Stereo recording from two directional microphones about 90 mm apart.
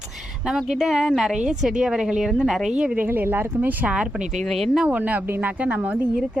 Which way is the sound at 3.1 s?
25° right (ahead or behind).